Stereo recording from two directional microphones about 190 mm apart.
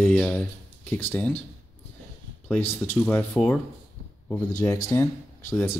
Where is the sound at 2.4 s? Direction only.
10° left (ahead or behind).